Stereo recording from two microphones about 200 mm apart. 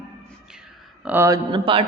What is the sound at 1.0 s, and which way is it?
Speech, 15° right (ahead or behind).